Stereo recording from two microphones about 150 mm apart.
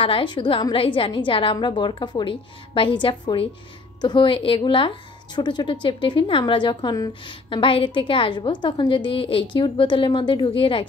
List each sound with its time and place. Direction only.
0.0 s speech: 35° left (ahead or behind)